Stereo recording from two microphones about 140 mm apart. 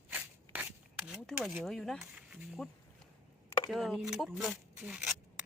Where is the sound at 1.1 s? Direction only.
5° right (ahead or behind).